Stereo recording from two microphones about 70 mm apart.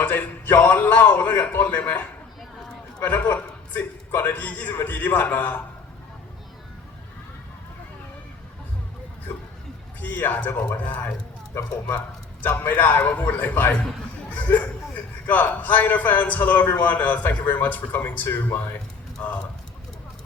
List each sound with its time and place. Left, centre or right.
0.0 s a man's voice: left
10.0 s a man's voice: left
12.4 s a man's voice: left